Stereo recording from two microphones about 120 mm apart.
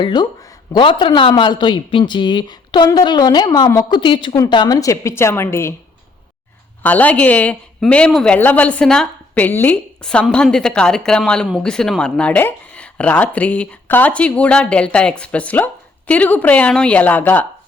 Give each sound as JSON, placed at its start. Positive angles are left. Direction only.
{"t": 0.0, "sound": "a man's voice", "side_deg": 35}
{"t": 6.8, "sound": "speech", "side_deg": 15}